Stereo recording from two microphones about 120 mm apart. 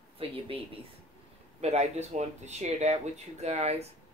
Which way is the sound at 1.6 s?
65° right (ahead or behind).